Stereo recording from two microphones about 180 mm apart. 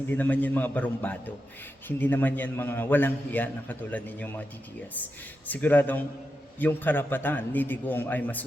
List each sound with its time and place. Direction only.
0.1 s a man's voice: 10° left (ahead or behind)
5.5 s a man's voice: 10° left (ahead or behind)